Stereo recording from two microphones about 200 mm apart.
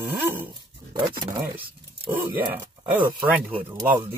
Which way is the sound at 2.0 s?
10° right (ahead or behind).